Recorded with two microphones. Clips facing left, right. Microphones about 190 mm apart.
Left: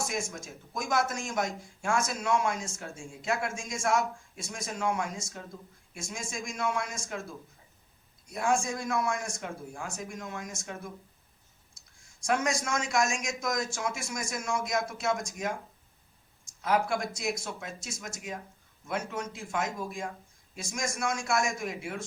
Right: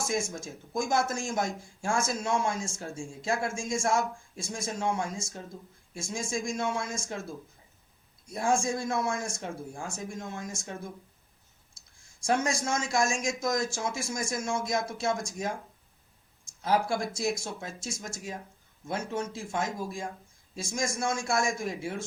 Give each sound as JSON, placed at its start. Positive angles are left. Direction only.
{"t": 0.0, "sound": "a man's voice", "side_deg": -25}
{"t": 8.3, "sound": "a man's voice", "side_deg": -30}
{"t": 12.2, "sound": "a man's voice", "side_deg": -30}
{"t": 16.6, "sound": "a man's voice", "side_deg": -30}